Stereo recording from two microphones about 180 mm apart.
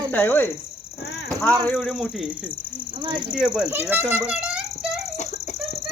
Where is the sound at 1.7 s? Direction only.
5° left (ahead or behind).